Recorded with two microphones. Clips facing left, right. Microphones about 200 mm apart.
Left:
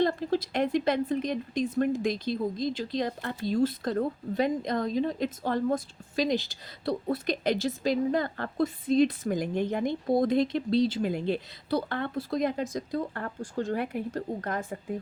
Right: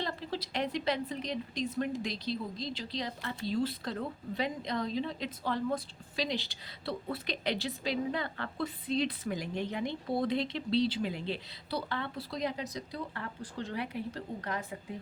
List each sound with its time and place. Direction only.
0.0 s speech: 50° left (ahead or behind)